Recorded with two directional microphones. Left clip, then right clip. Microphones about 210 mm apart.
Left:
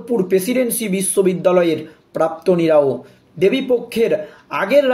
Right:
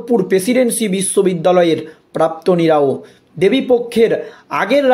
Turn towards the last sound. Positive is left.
turn(degrees=-35)  # may be behind; listen again after turning